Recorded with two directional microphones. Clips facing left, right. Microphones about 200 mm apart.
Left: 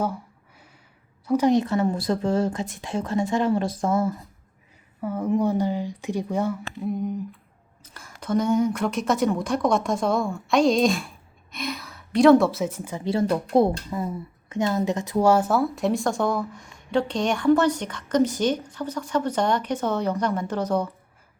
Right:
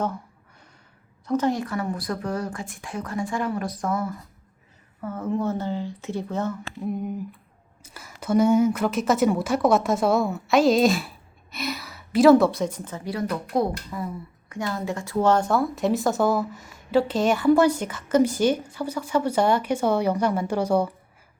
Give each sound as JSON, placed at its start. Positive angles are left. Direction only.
{"t": 1.3, "sound": "speech", "side_deg": 15}
{"t": 4.9, "sound": "speech", "side_deg": 10}
{"t": 6.8, "sound": "speech", "side_deg": -5}
{"t": 13.1, "sound": "speech", "side_deg": 25}